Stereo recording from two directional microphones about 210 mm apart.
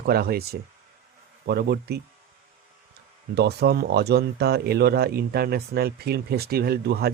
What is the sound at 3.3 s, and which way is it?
Speech, 50° right (ahead or behind).